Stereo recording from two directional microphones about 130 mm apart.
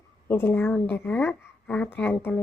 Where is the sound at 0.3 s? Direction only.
15° left (ahead or behind).